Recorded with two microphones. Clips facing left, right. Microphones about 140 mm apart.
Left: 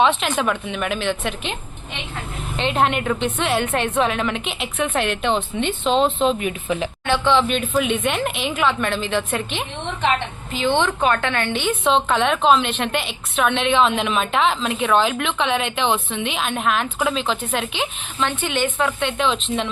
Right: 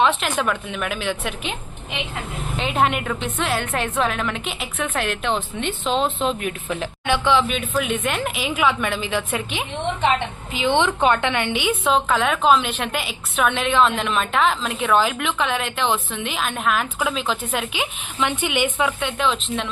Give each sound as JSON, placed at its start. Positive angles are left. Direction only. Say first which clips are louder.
{"t": 0.0, "sound": "a woman's voice", "louder": "left 1 dB", "side_deg": 0}
{"t": 2.6, "sound": "a woman's voice", "louder": "left 1 dB", "side_deg": -5}